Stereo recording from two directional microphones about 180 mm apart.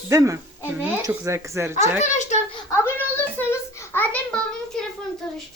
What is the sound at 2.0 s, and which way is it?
Speech, 40° left (ahead or behind).